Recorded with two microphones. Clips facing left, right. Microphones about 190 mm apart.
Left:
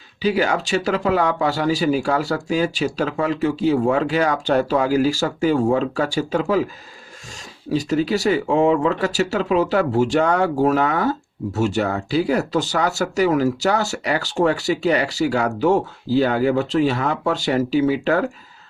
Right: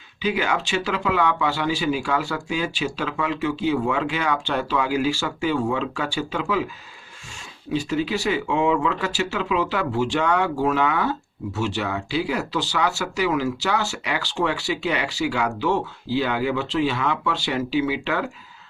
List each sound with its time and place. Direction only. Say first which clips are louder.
0.2 s speech: left 4 dB; 35° left (ahead or behind)
7.7 s speech: left 4 dB; 40° left (ahead or behind)